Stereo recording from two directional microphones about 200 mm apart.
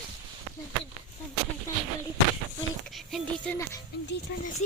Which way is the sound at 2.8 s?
Centre (ahead or behind).